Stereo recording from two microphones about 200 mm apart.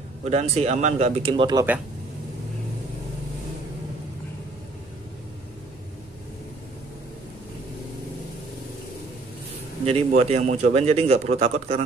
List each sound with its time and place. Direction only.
0.2 s a man's voice: 35° right (ahead or behind)
9.8 s a man's voice: 30° right (ahead or behind)